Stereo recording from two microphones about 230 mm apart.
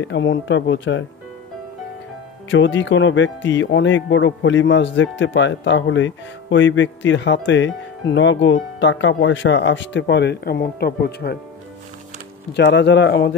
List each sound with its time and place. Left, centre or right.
0.0 s speech: left
2.5 s speech: left
12.5 s speech: left